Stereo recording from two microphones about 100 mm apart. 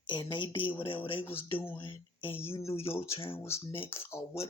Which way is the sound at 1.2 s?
20° left (ahead or behind).